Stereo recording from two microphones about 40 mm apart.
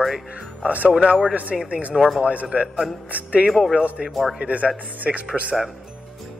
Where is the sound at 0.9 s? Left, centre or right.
Right.